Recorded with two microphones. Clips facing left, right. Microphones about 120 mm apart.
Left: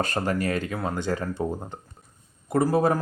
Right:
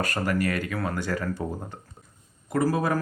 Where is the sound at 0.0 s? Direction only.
25° left (ahead or behind).